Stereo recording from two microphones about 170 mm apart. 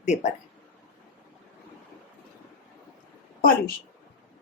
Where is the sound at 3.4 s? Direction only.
55° left (ahead or behind).